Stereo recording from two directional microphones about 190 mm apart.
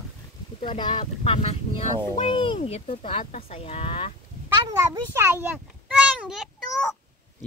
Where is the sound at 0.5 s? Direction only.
25° left (ahead or behind).